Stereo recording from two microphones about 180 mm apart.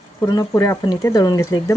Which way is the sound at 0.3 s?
20° left (ahead or behind).